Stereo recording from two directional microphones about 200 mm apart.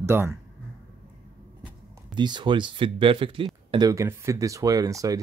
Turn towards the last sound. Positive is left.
turn(degrees=-15)  # may be behind; listen again after turning